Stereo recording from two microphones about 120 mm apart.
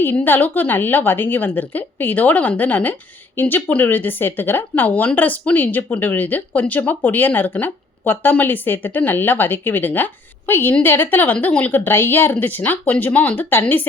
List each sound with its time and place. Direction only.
0.0 s speech: 15° left (ahead or behind)